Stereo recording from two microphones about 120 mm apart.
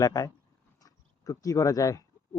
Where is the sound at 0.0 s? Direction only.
30° left (ahead or behind).